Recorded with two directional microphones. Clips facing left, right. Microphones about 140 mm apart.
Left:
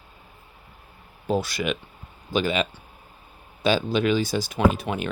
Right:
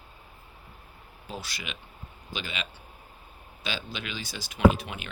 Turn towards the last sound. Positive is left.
turn(degrees=45)  # may be behind; listen again after turning